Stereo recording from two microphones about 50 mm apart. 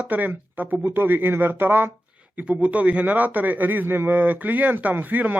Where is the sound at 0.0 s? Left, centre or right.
Right.